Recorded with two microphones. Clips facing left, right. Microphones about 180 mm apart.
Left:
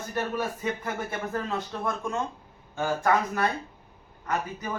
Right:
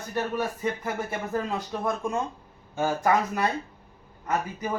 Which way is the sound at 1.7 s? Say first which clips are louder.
Right 4 dB; 15° right (ahead or behind).